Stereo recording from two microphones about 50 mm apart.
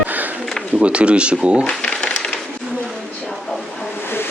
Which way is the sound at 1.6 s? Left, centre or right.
Left.